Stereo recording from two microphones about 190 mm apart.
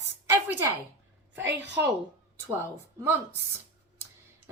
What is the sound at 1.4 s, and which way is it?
Speech, 70° right (ahead or behind).